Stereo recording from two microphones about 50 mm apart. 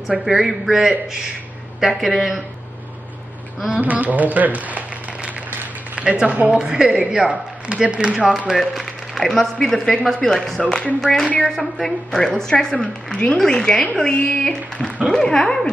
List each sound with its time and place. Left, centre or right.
0.2 s speech: centre
3.8 s speech: right
8.3 s a woman's voice: centre